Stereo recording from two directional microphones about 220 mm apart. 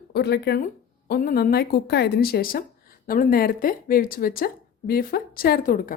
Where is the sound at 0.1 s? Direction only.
50° left (ahead or behind).